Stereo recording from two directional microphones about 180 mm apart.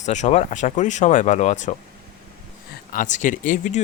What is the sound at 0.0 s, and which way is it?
Speech, 40° left (ahead or behind).